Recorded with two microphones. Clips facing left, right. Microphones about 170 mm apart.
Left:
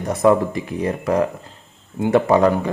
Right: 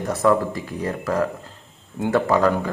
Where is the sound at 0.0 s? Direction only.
20° left (ahead or behind).